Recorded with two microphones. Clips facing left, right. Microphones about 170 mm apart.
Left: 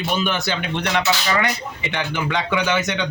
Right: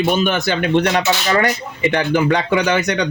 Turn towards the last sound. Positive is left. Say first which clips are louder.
# right 4 dB
turn(degrees=-45)  # may be behind; listen again after turning